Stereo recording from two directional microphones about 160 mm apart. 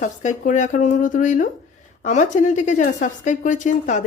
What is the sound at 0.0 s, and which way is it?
A woman's voice, 50° left (ahead or behind).